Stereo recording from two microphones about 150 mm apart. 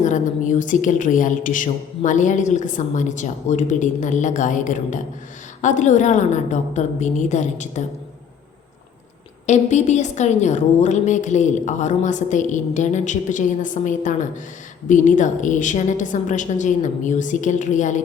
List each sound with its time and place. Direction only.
0.0 s a woman's voice: 55° left (ahead or behind)
9.5 s a woman's voice: 50° left (ahead or behind)